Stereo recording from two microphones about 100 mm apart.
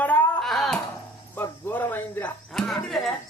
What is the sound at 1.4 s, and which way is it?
Speech, 20° left (ahead or behind).